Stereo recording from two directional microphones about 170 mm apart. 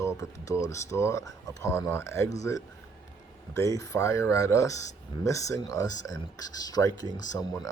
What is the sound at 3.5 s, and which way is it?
Speech, 20° left (ahead or behind).